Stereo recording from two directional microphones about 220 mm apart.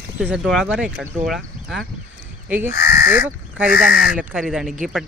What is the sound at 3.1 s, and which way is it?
Speech, 5° right (ahead or behind).